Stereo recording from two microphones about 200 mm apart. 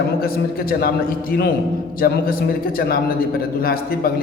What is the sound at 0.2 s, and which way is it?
A man's voice, 50° left (ahead or behind).